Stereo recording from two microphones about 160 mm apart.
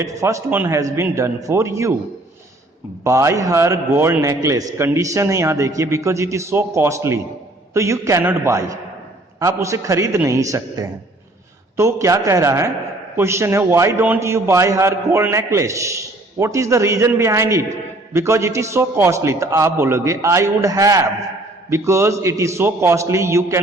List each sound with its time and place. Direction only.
0.0 s a man's voice: 20° right (ahead or behind)
3.0 s a man's voice: 20° right (ahead or behind)